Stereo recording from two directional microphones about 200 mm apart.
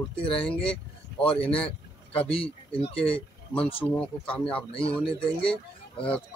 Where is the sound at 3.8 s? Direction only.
5° left (ahead or behind).